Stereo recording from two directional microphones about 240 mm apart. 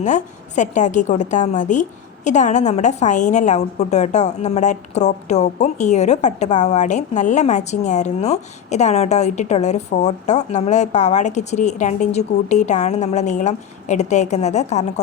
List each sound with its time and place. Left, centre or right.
0.0 s a woman's voice: left